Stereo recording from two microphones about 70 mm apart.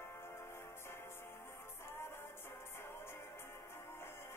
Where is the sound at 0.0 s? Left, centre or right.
Left.